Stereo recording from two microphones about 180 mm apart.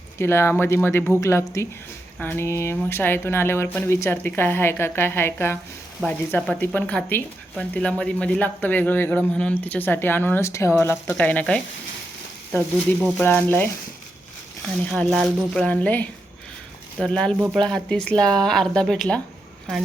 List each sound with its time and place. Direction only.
0.2 s a woman's voice: 15° left (ahead or behind)
14.8 s a woman's voice: 5° left (ahead or behind)